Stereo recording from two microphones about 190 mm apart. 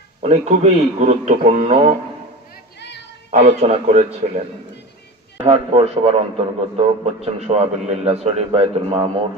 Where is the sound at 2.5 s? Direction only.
65° left (ahead or behind).